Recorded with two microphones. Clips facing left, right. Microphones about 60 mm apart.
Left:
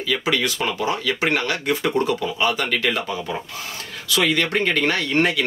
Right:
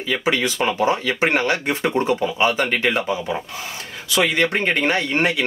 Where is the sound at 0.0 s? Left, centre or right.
Right.